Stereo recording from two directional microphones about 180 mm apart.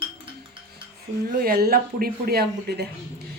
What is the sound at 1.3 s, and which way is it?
Speech, 55° right (ahead or behind).